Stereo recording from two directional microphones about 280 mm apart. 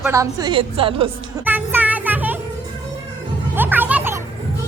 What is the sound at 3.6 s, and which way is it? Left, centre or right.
Music, centre.